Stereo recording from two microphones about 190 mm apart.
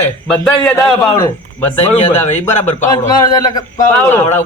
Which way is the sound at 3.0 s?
20° left (ahead or behind).